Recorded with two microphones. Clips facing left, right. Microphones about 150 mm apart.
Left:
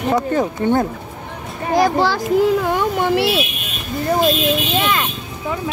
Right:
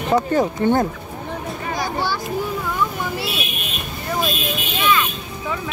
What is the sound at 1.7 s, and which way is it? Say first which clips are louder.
A child's voice: left 10 dB; 90° left.